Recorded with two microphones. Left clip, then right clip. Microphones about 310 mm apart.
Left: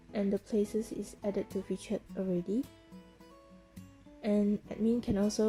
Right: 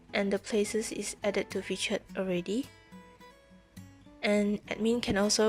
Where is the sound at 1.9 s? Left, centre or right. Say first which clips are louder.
Right 4 dB; right.